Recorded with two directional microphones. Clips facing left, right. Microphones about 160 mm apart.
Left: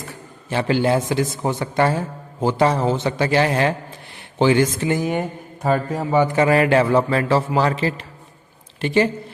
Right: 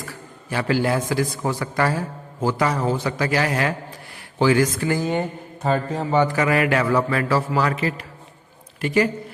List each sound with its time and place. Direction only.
0.0 s a man's voice: 25° left (ahead or behind); by 6.2 s 10° left (ahead or behind)
6.2 s a man's voice: 25° left (ahead or behind)